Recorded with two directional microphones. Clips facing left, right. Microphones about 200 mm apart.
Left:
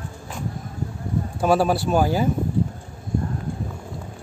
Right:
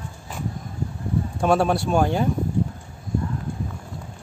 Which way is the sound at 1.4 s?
5° left (ahead or behind).